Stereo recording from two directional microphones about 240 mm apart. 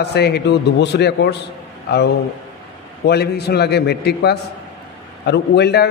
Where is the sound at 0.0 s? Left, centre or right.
Left.